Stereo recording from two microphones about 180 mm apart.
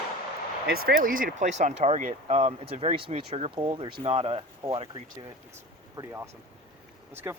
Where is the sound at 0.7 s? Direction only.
55° right (ahead or behind); by 5.0 s 30° right (ahead or behind).